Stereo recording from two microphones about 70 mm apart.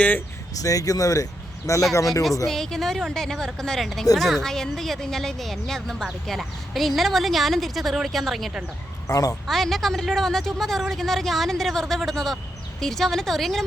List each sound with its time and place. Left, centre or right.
0.6 s speech: left
2.5 s speech: centre
9.0 s speech: left
9.3 s speech: centre